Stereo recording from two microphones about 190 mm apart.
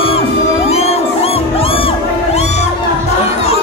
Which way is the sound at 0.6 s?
35° left (ahead or behind).